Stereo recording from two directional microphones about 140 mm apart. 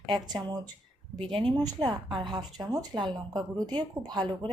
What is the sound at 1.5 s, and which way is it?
A woman's voice, 30° right (ahead or behind).